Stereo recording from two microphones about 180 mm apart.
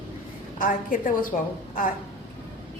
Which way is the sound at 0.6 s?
50° left (ahead or behind).